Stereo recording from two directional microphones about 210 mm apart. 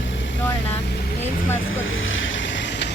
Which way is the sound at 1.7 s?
70° left (ahead or behind).